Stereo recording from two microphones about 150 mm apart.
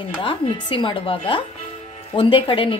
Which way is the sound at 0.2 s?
35° left (ahead or behind).